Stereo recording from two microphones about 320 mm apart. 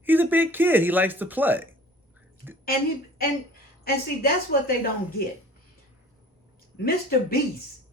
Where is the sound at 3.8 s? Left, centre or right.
Left.